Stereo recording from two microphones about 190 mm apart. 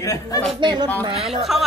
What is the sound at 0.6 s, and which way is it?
Speech, 25° right (ahead or behind).